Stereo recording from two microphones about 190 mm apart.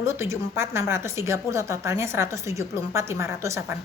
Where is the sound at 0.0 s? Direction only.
15° right (ahead or behind).